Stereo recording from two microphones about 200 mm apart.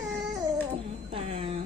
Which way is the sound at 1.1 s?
30° right (ahead or behind).